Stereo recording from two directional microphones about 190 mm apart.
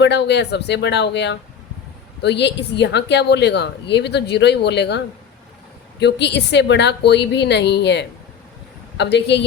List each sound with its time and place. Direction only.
0.0 s speech: 65° left (ahead or behind)